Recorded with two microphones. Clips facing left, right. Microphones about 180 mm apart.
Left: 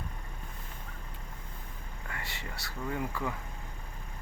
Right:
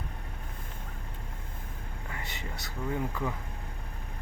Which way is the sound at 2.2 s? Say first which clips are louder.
Right 2 dB; 20° right (ahead or behind).